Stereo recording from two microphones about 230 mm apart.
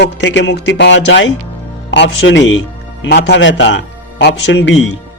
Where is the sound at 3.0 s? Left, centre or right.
Left.